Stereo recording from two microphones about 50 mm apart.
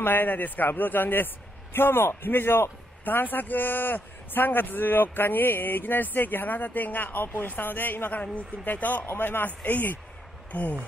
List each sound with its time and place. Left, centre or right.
0.0 s a man's voice: left